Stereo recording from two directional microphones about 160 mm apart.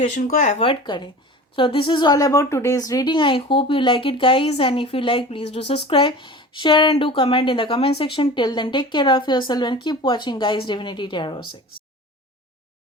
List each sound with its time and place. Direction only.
0.1 s speech: 50° left (ahead or behind)
0.6 s a woman's voice: 30° left (ahead or behind)